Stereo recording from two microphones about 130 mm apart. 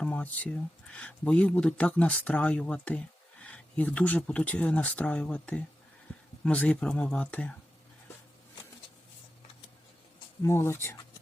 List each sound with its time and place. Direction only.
0.0 s speech: 10° left (ahead or behind)
6.1 s a sound: 10° left (ahead or behind)
6.4 s speech: 10° left (ahead or behind)
10.4 s speech: 20° left (ahead or behind)